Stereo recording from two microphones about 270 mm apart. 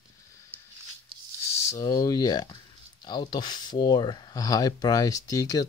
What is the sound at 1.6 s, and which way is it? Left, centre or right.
Speech, centre.